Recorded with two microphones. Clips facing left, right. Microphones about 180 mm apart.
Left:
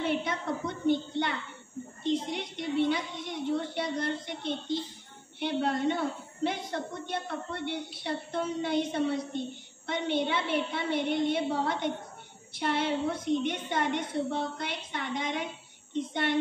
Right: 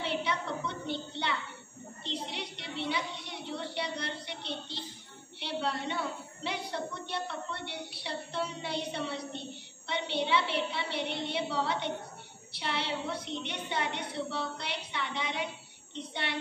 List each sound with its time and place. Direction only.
0.0 s a woman's voice: 50° left (ahead or behind)